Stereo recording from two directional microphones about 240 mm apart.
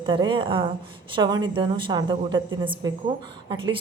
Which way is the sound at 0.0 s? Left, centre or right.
Centre.